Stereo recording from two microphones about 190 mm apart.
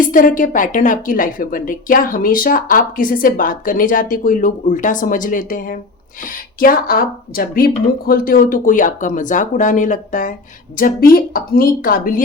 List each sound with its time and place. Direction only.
0.0 s a woman's voice: 45° left (ahead or behind)